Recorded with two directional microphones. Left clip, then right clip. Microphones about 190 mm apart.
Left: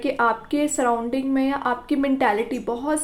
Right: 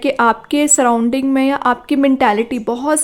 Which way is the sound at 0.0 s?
40° right (ahead or behind).